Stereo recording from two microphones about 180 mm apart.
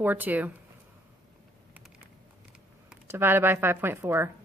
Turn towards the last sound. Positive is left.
turn(degrees=-15)  # may be behind; listen again after turning